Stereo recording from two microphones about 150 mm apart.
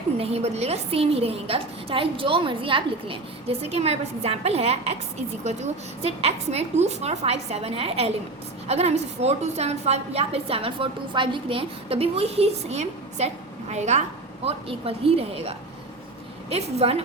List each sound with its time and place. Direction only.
0.2 s a woman's voice: 45° right (ahead or behind)